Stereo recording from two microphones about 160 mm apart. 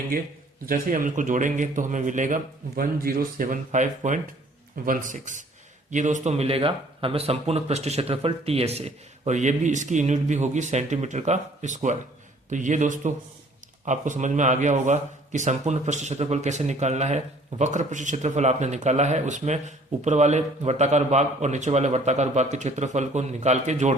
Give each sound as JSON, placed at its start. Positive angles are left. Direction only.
{"t": 0.6, "sound": "speech", "side_deg": -60}